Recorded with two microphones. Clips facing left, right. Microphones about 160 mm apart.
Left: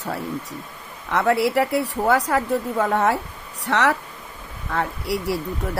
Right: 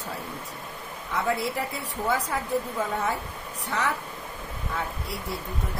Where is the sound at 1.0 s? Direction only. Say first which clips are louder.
Left 8 dB; 75° left (ahead or behind).